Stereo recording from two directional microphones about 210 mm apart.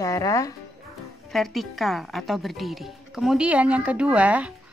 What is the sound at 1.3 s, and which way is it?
A woman's voice, centre (ahead or behind).